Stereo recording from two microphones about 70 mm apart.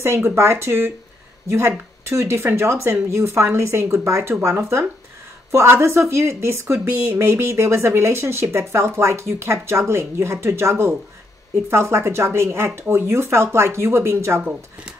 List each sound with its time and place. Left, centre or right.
0.0 s a woman's voice: right
2.0 s a woman's voice: right